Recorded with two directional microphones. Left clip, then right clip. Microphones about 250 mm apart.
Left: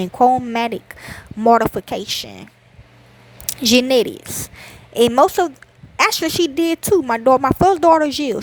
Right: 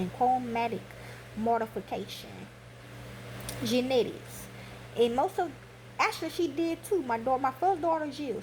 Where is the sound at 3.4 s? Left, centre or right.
Left.